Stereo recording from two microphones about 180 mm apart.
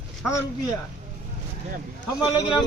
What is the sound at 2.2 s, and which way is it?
Speech, 25° left (ahead or behind).